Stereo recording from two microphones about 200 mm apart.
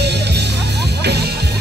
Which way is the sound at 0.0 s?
55° right (ahead or behind).